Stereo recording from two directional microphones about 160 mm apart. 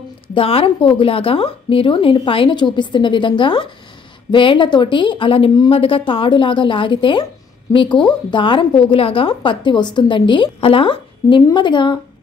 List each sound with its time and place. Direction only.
0.3 s a woman's voice: 35° left (ahead or behind)